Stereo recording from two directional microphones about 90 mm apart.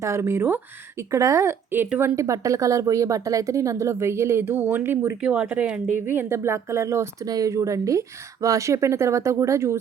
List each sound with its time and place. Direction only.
0.0 s speech: 30° right (ahead or behind)
5.2 s speech: 10° right (ahead or behind); by 9.8 s 30° right (ahead or behind)